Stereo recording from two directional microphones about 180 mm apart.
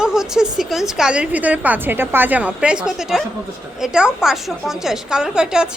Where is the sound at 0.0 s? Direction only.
5° right (ahead or behind).